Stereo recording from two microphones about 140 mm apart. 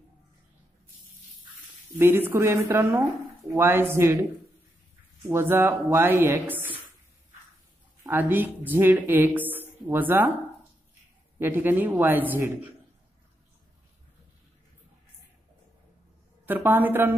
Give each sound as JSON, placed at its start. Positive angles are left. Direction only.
{"t": 2.0, "sound": "a woman's voice", "side_deg": -15}
{"t": 8.0, "sound": "a woman's voice", "side_deg": -15}
{"t": 11.3, "sound": "a woman's voice", "side_deg": -15}
{"t": 16.4, "sound": "a woman's voice", "side_deg": -15}